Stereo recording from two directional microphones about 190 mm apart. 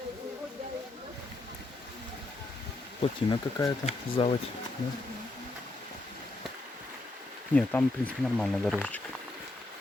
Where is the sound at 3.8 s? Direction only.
30° left (ahead or behind).